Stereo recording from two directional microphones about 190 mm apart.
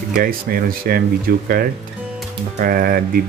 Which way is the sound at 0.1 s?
50° right (ahead or behind).